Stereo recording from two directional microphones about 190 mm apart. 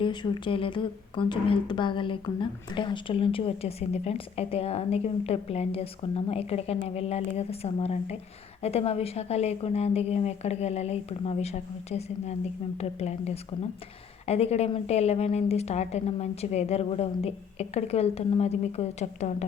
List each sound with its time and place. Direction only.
0.0 s speech: 25° left (ahead or behind)